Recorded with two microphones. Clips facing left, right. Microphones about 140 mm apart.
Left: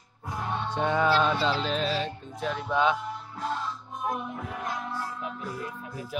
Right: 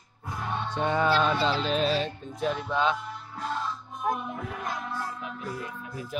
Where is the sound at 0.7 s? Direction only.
Centre (ahead or behind).